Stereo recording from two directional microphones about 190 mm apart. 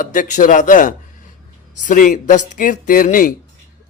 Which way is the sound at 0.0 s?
40° left (ahead or behind).